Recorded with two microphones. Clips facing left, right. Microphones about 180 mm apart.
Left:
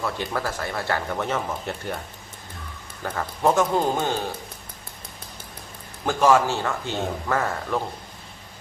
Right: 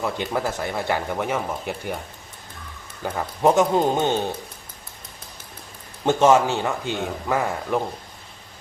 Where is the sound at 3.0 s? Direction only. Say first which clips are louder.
Right 3 dB; 15° right (ahead or behind).